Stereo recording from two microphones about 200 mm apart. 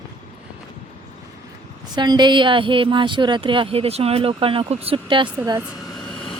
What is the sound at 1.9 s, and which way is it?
A woman's voice, 20° right (ahead or behind).